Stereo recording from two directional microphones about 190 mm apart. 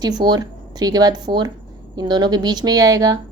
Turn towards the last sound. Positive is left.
turn(degrees=-20)  # may be behind; listen again after turning